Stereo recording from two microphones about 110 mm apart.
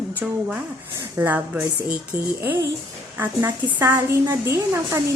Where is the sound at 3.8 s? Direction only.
25° right (ahead or behind).